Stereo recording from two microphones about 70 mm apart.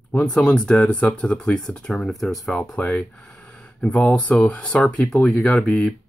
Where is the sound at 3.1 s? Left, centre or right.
Centre.